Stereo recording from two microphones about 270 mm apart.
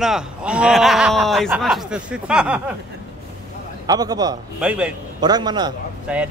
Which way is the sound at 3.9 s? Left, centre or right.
Centre.